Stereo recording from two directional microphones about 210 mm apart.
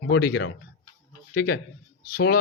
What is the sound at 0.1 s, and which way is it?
A man's voice, 50° left (ahead or behind).